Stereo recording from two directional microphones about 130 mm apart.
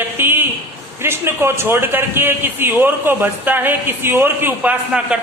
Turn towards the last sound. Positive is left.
turn(degrees=-10)  # may be behind; listen again after turning